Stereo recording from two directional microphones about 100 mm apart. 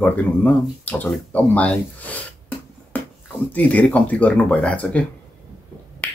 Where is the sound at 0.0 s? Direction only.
15° left (ahead or behind).